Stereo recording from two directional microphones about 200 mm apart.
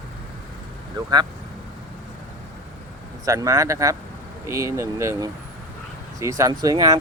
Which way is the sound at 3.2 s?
15° right (ahead or behind).